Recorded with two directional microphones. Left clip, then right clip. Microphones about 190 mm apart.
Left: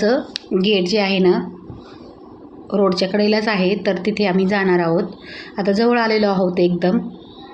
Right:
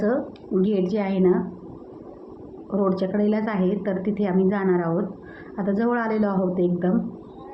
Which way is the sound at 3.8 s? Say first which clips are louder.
Left 7 dB; 45° left (ahead or behind).